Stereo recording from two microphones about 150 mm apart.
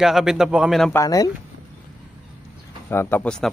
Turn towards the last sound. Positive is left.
turn(degrees=5)  # may be behind; listen again after turning